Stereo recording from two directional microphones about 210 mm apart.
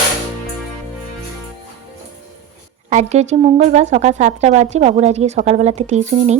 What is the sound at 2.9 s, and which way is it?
Speech, 30° right (ahead or behind).